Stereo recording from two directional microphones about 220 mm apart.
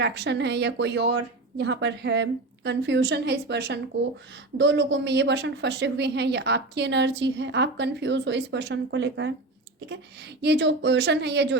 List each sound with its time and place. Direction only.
0.0 s a woman's voice: 50° right (ahead or behind)